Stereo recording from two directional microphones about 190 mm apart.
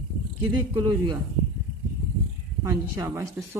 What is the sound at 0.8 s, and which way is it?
Speech, 20° right (ahead or behind).